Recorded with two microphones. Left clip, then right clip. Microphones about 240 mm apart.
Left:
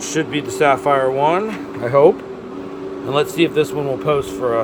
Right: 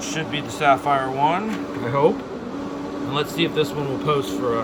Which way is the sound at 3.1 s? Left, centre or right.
Left.